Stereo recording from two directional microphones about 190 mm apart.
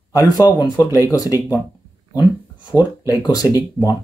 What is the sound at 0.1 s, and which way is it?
Speech, 20° left (ahead or behind).